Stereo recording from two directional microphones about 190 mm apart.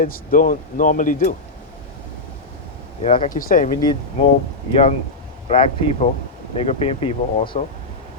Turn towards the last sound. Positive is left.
turn(degrees=30)  # may be behind; listen again after turning